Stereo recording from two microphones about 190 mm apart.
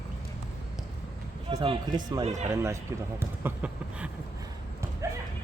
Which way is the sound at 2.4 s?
15° right (ahead or behind).